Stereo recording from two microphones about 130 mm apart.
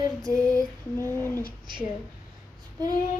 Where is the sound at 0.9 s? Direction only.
15° left (ahead or behind).